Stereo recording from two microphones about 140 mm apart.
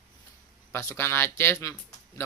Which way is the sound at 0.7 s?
20° left (ahead or behind).